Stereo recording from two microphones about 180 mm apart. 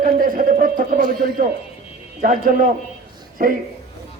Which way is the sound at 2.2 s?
50° right (ahead or behind).